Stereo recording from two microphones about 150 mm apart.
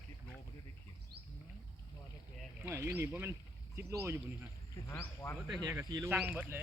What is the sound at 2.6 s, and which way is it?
Speech, 15° right (ahead or behind).